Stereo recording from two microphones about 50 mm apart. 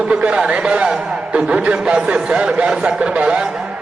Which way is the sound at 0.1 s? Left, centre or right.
Right.